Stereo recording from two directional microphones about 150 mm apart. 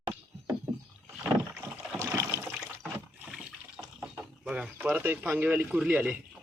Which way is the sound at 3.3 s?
5° right (ahead or behind).